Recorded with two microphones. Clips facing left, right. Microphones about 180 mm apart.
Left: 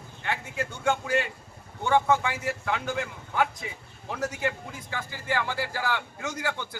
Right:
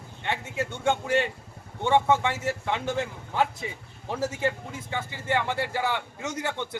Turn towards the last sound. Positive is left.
turn(degrees=-20)  # may be behind; listen again after turning